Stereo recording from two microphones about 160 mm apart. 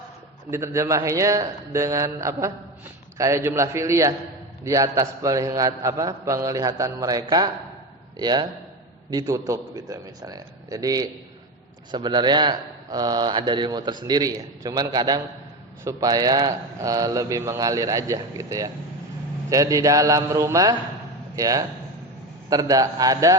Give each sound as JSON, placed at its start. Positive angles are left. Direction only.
{"t": 0.5, "sound": "a man's voice", "side_deg": -15}